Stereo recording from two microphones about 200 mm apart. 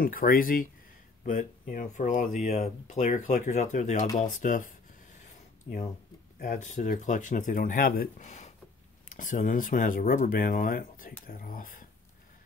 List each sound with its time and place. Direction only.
0.0 s speech: 45° left (ahead or behind)
6.4 s speech: 40° left (ahead or behind)